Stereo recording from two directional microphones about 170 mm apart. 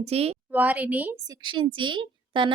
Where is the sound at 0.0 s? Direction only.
35° right (ahead or behind).